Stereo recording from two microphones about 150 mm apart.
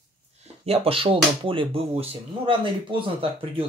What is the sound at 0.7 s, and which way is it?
Speech, 40° right (ahead or behind).